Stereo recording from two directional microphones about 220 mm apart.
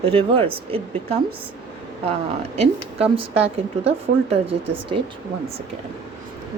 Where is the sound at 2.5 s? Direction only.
25° right (ahead or behind).